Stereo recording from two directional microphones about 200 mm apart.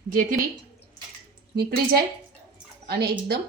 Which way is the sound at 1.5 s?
50° right (ahead or behind).